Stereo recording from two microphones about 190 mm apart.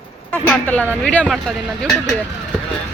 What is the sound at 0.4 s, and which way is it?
Speech, 10° left (ahead or behind).